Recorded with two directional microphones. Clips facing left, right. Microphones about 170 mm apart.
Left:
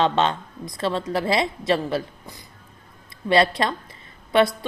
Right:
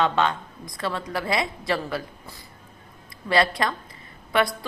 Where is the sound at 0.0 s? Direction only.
25° left (ahead or behind).